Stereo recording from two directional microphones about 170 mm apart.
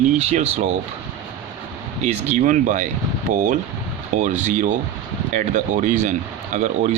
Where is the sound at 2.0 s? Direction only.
45° right (ahead or behind).